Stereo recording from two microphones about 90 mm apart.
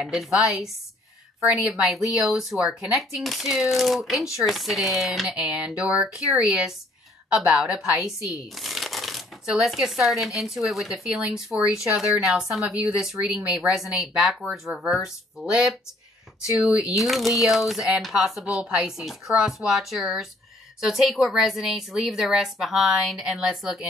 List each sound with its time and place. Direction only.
0.0 s speech: centre (ahead or behind)
1.5 s a woman's voice: 10° right (ahead or behind)